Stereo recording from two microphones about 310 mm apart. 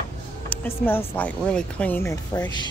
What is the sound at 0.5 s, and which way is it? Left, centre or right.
Speech, centre.